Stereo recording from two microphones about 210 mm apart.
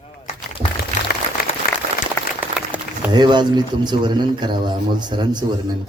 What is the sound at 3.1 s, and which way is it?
A man's voice, 20° right (ahead or behind).